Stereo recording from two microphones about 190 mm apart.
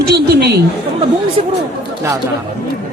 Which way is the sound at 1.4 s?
35° right (ahead or behind).